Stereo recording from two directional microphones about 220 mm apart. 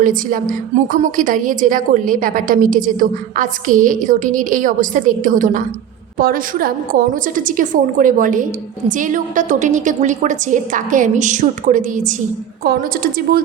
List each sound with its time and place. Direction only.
0.0 s a woman's voice: 40° right (ahead or behind)